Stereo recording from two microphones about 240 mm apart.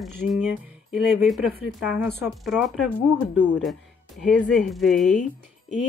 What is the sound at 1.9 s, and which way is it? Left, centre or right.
Speech, centre.